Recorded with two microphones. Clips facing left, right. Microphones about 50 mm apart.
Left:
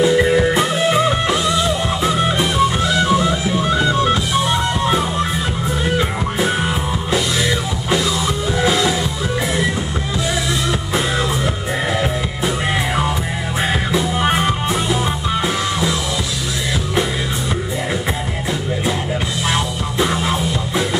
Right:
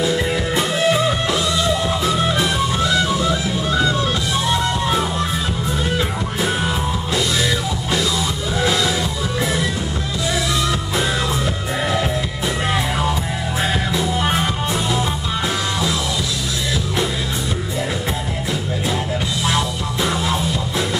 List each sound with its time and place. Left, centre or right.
0.0 s music: left
6.4 s music: centre
12.7 s music: centre
19.4 s music: centre